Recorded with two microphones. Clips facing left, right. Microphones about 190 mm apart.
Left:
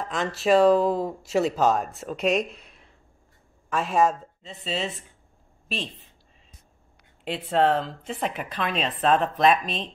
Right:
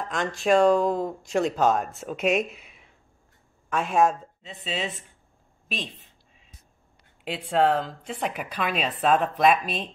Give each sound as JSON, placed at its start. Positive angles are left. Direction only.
{"t": 0.0, "sound": "speech", "side_deg": 0}
{"t": 7.2, "sound": "speech", "side_deg": 0}